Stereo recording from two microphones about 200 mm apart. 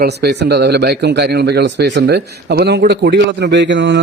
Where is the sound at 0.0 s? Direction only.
55° right (ahead or behind).